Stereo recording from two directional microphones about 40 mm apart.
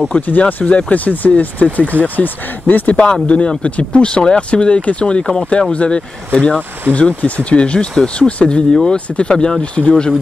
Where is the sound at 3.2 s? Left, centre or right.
Left.